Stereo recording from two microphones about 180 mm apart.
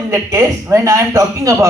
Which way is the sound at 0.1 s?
15° right (ahead or behind).